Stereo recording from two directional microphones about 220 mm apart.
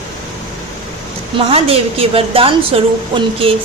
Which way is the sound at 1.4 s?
25° right (ahead or behind).